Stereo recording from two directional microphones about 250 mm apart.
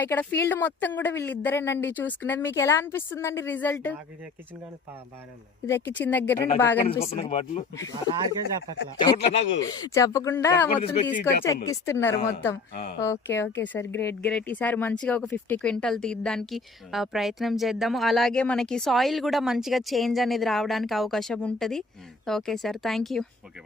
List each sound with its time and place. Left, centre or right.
0.0 s speech: centre
5.6 s speech: centre
6.8 s speech: left
9.0 s speech: centre
10.7 s speech: left; by 23.2 s centre